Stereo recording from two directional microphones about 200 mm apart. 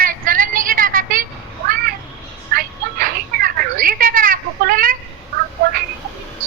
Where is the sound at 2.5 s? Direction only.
45° right (ahead or behind).